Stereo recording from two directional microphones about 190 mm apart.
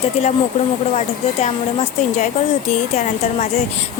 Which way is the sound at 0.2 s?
35° left (ahead or behind).